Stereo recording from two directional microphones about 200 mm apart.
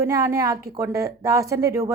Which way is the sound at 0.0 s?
15° right (ahead or behind).